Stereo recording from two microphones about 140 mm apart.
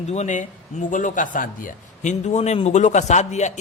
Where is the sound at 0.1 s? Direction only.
55° left (ahead or behind).